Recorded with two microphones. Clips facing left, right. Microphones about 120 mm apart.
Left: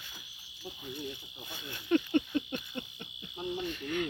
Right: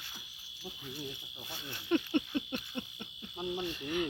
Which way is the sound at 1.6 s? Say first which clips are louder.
Left 3 dB; 5° right (ahead or behind).